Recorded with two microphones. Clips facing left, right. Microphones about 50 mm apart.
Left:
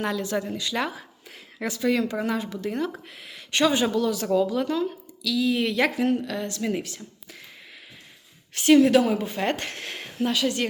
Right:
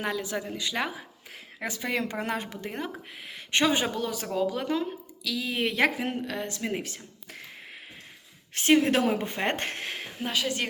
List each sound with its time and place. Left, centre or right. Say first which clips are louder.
0.0 s speech: left 4 dB; centre; by 2.2 s right
2.2 s a woman's voice: left 4 dB; right
2.6 s speech: left 6 dB; right
4.4 s speech: left 1 dB; centre
6.8 s speech: left 1 dB; right
8.5 s speech: left 5 dB; right
9.8 s speech: left 6 dB; centre